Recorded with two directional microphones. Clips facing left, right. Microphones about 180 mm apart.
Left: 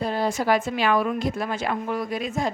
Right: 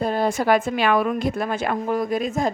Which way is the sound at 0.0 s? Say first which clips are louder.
Right 3 dB; 50° right (ahead or behind).